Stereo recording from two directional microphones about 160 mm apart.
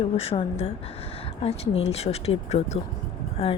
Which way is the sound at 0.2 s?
35° left (ahead or behind).